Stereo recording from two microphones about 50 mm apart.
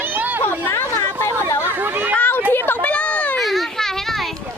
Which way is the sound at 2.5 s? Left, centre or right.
Left.